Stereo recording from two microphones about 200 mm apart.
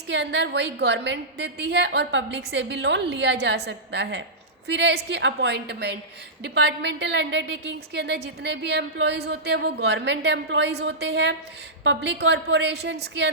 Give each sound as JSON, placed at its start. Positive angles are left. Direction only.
{"t": 0.1, "sound": "a woman's voice", "side_deg": -60}